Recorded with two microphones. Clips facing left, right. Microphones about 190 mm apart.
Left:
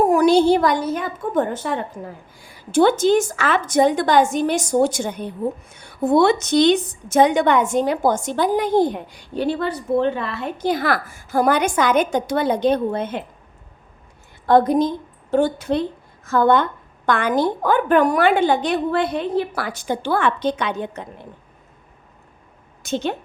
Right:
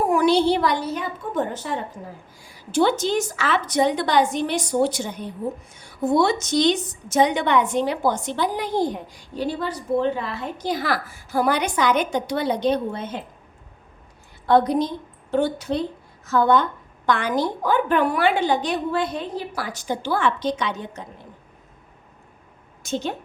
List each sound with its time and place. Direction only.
0.0 s a woman's voice: 40° left (ahead or behind); by 13.2 s 55° left (ahead or behind)
14.4 s a woman's voice: 50° left (ahead or behind)
22.8 s a woman's voice: 65° left (ahead or behind)